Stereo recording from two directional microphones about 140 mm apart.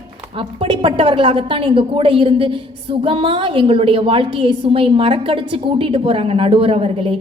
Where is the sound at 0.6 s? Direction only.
35° right (ahead or behind).